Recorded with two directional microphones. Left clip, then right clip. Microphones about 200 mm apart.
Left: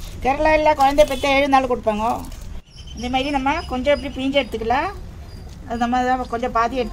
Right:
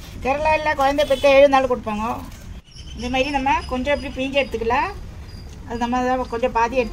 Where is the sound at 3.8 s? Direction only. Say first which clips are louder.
Left 3 dB; 40° left (ahead or behind).